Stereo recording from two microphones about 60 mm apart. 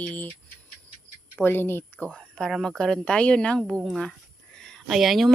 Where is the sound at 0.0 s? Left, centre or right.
Left.